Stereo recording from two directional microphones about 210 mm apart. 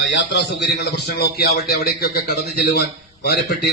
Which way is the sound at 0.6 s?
50° left (ahead or behind).